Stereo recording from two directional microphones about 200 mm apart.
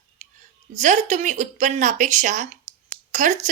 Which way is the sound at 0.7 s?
35° right (ahead or behind).